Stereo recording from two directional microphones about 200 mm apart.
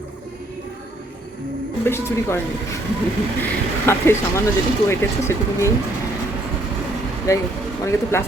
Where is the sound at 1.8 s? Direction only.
10° left (ahead or behind).